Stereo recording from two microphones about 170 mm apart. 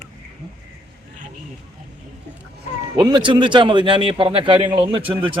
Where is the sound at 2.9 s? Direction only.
25° right (ahead or behind).